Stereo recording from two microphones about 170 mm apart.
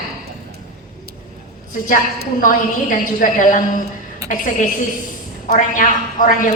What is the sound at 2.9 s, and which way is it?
A woman's voice, 55° left (ahead or behind).